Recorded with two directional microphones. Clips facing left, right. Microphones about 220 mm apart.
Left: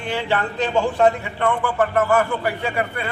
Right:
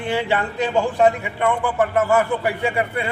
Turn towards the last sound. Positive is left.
turn(degrees=-15)  # may be behind; listen again after turning